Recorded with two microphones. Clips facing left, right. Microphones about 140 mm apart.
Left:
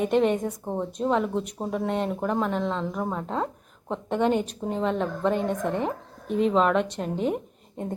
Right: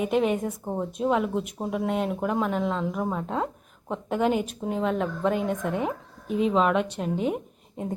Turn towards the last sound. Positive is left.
turn(degrees=-5)  # may be behind; listen again after turning